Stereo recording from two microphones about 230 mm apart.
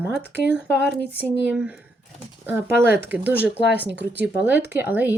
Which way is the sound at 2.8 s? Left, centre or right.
Centre.